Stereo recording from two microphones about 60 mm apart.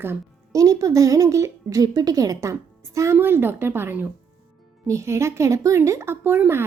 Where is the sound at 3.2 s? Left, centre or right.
Right.